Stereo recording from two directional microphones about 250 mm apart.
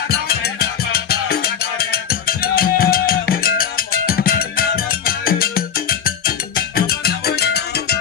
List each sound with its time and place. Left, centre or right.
0.1 s music: left